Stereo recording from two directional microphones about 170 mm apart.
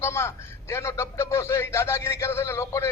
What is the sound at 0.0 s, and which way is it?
A man's voice, 15° left (ahead or behind).